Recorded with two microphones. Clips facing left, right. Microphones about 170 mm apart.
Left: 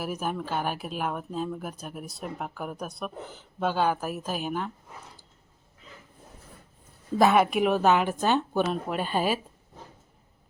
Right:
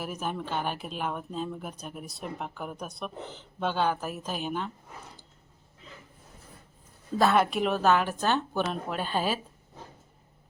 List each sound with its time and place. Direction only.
0.0 s speech: 5° left (ahead or behind)
7.2 s speech: 15° left (ahead or behind)